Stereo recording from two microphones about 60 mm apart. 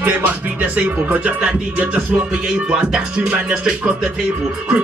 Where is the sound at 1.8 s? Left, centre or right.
Centre.